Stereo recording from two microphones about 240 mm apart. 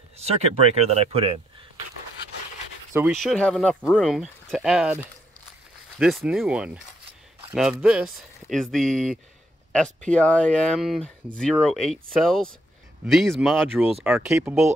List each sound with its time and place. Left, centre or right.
0.2 s speech: right
3.1 s speech: centre